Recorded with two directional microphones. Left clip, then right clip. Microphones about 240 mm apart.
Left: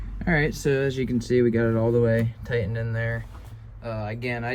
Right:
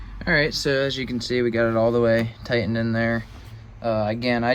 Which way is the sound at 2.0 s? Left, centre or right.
Centre.